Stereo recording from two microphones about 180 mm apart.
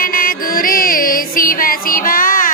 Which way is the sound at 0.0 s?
50° left (ahead or behind).